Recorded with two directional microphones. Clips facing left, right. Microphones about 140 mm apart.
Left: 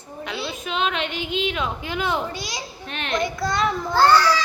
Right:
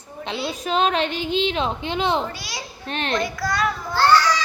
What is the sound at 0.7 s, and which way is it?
A woman's voice, 40° right (ahead or behind).